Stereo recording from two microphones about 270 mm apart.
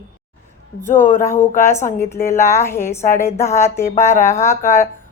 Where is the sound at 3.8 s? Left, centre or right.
Left.